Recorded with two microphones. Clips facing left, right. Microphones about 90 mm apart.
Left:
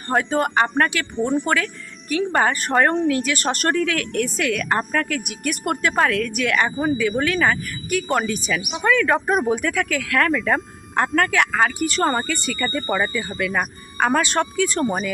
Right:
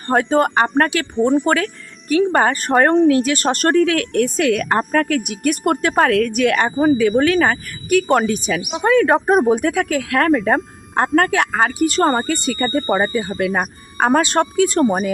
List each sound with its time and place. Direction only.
0.1 s a woman's voice: 40° right (ahead or behind)
7.2 s a woman's voice: 45° right (ahead or behind)
8.0 s a woman's voice: 40° right (ahead or behind)